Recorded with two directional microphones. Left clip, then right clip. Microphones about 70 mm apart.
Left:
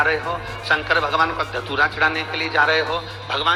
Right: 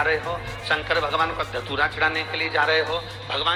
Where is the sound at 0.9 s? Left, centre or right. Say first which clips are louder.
Left 3 dB; left.